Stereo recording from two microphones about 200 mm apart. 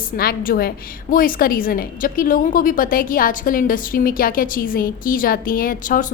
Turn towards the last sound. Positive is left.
turn(degrees=45)  # may be behind; listen again after turning